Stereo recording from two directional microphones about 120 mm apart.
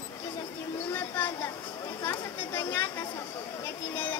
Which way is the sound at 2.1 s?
20° left (ahead or behind).